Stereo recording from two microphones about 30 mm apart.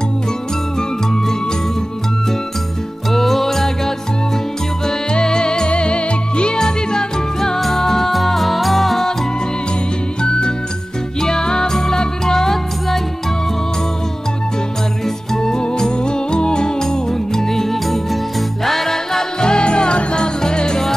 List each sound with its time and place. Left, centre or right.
3.1 s music: centre
5.1 s music: left
6.6 s music: left; by 9.0 s centre
10.2 s music: left
11.1 s music: left
15.3 s music: left
16.9 s music: centre
19.4 s music: left